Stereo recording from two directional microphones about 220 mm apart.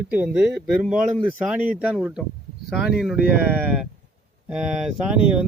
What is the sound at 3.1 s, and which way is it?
Speech, 50° left (ahead or behind).